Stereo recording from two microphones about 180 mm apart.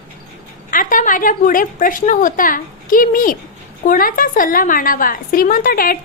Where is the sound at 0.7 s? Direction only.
45° left (ahead or behind).